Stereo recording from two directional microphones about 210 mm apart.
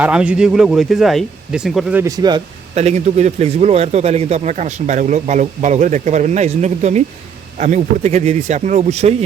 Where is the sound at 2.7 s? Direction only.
30° right (ahead or behind).